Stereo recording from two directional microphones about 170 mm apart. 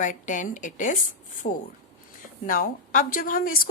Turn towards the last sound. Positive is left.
turn(degrees=55)  # may be behind; listen again after turning